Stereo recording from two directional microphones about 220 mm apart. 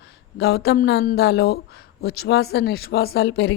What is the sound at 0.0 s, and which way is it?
Speech, 50° left (ahead or behind).